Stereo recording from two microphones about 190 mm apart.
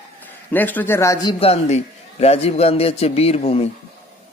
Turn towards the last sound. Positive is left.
turn(degrees=30)  # may be behind; listen again after turning